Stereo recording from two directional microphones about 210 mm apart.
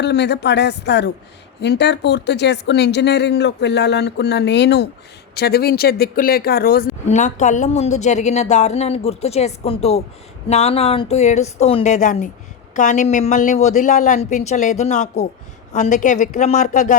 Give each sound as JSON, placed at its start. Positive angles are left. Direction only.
{"t": 0.0, "sound": "speech", "side_deg": 55}